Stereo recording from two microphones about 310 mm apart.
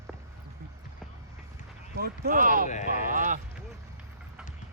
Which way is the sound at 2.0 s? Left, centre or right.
Right.